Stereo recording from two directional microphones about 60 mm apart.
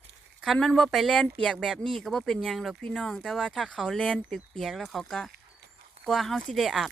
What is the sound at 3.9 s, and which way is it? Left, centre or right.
Speech, centre.